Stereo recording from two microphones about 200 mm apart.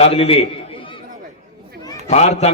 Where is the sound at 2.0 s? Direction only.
35° left (ahead or behind).